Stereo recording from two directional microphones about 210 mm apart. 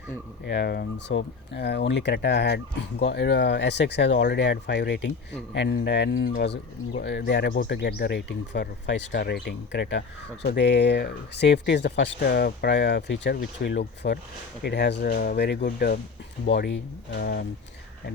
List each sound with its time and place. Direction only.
0.4 s speech: 55° left (ahead or behind)
17.1 s speech: 50° left (ahead or behind)